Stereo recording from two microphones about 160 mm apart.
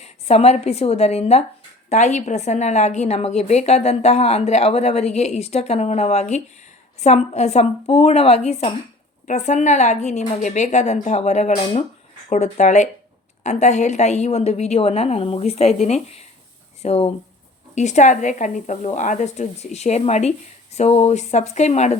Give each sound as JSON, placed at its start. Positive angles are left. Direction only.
{"t": 0.0, "sound": "a woman's voice", "side_deg": 40}